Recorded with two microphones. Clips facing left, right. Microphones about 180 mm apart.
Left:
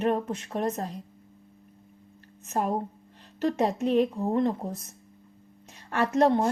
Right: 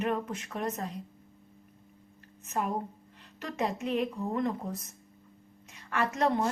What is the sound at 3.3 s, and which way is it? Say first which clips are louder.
A woman's voice: left 7 dB; 30° left (ahead or behind).